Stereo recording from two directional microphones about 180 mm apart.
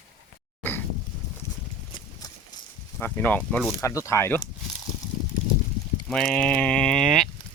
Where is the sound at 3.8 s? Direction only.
15° left (ahead or behind).